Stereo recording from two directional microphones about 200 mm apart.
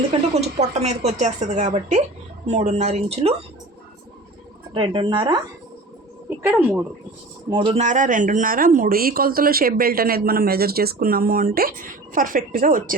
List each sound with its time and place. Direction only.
0.1 s a woman's voice: 30° right (ahead or behind)
4.7 s a woman's voice: 25° right (ahead or behind)
6.4 s speech: 10° right (ahead or behind)
7.5 s a woman's voice: 25° right (ahead or behind)
7.8 s speech: 40° right (ahead or behind)